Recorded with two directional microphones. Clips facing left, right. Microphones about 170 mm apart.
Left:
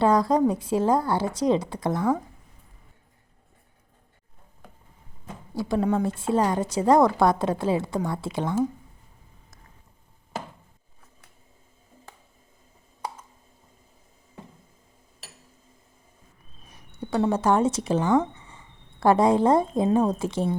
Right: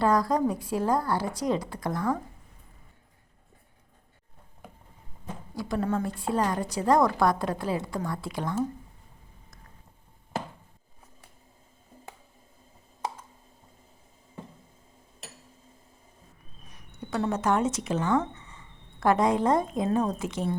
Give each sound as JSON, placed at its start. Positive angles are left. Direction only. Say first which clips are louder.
{"t": 0.0, "sound": "a woman's voice", "louder": "left 4 dB", "side_deg": 25}
{"t": 5.5, "sound": "a woman's voice", "louder": "left 5 dB", "side_deg": 25}
{"t": 16.6, "sound": "speech", "louder": "left 5 dB", "side_deg": 30}